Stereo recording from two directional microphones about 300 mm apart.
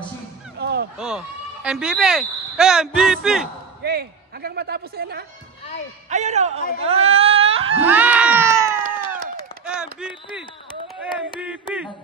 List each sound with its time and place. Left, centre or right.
0.6 s a sound: right
0.9 s speech: centre
3.8 s a man's voice: right
7.8 s music: centre
9.7 s a sound: centre
11.4 s speech: centre